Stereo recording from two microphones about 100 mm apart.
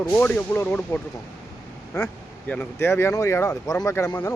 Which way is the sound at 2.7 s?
25° left (ahead or behind).